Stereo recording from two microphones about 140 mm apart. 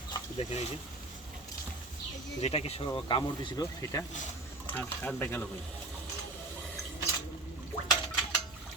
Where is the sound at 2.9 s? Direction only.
35° left (ahead or behind).